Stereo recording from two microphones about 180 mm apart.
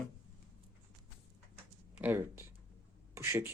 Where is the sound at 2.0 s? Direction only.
10° right (ahead or behind).